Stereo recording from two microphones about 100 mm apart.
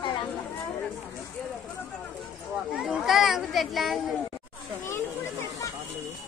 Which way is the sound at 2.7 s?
5° right (ahead or behind).